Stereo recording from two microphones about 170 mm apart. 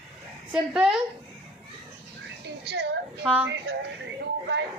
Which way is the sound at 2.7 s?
80° right.